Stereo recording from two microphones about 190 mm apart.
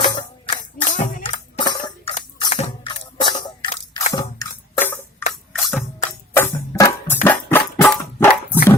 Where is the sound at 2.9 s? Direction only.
25° left (ahead or behind).